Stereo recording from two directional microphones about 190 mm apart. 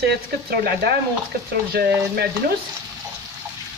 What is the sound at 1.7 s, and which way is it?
Speech, 55° right (ahead or behind).